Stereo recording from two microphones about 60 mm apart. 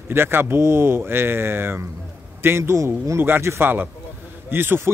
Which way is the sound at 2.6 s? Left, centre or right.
Right.